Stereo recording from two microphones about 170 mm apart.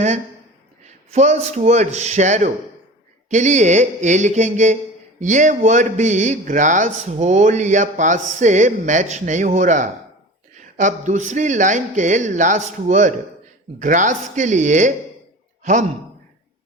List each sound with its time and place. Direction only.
0.9 s a man's voice: 40° right (ahead or behind)